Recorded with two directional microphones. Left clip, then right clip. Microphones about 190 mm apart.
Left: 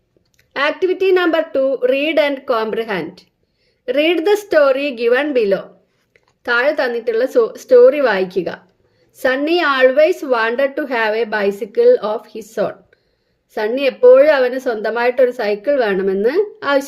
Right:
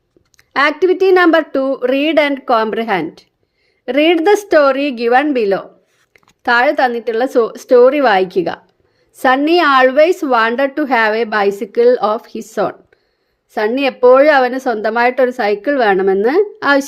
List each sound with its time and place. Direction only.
0.3 s a woman's voice: 45° right (ahead or behind)